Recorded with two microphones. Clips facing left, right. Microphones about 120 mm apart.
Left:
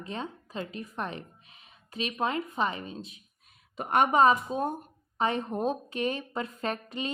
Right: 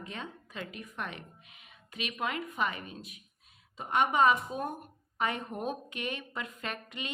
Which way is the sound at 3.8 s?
55° left (ahead or behind).